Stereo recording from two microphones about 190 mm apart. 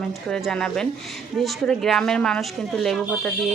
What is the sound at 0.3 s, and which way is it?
Speech, 5° left (ahead or behind).